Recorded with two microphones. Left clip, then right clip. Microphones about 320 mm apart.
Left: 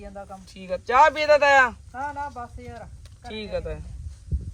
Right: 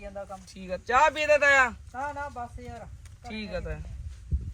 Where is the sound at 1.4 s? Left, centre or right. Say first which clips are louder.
Left 3 dB; left.